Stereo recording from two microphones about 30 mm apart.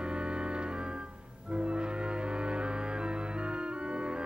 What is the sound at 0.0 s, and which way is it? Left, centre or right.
Music, right.